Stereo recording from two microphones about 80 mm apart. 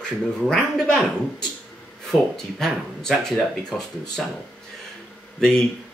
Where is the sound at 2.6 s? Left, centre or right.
Centre.